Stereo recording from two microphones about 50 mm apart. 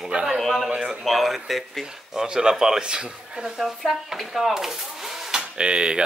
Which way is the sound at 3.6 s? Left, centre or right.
Centre.